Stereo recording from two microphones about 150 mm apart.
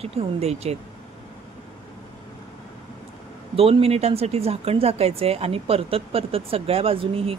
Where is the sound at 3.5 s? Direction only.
40° right (ahead or behind).